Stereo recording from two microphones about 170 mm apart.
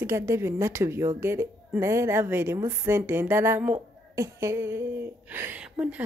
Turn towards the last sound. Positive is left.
turn(degrees=-10)  # may be behind; listen again after turning